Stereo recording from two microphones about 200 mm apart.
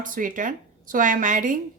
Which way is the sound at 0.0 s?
40° right (ahead or behind).